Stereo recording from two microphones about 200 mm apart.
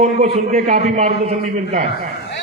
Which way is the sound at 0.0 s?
35° right (ahead or behind).